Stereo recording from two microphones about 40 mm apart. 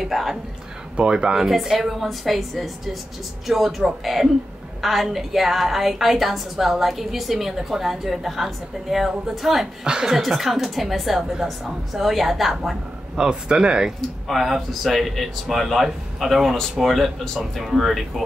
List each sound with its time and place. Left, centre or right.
0.0 s a woman's voice: centre
0.9 s speech: right
1.4 s a woman's voice: centre
9.8 s speech: centre
10.1 s a woman's voice: centre
13.1 s speech: right
14.2 s a woman's voice: centre
16.8 s a woman's voice: centre
17.4 s a woman's voice: centre